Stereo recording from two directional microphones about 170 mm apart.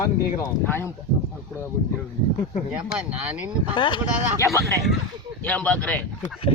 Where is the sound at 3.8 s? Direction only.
30° left (ahead or behind).